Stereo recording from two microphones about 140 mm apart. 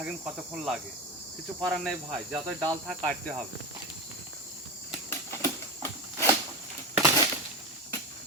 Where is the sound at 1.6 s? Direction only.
Centre (ahead or behind).